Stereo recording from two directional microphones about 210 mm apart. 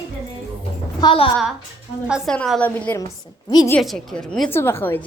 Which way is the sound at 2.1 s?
Centre (ahead or behind).